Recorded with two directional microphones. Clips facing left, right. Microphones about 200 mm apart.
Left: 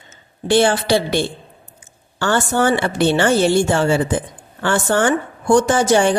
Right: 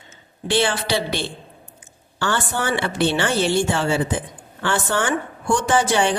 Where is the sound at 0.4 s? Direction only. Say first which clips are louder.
Left 6 dB; 45° left (ahead or behind).